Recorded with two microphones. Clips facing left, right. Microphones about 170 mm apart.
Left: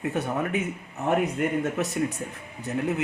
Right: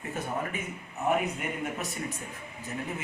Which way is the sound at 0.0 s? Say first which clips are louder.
Left 6 dB; 70° left (ahead or behind).